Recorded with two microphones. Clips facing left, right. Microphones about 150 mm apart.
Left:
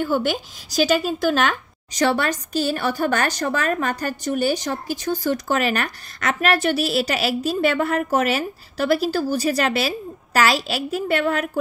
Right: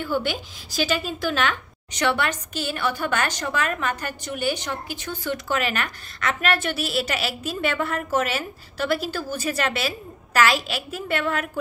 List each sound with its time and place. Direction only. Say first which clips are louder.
0.0 s a woman's voice: left 4 dB; 45° left (ahead or behind)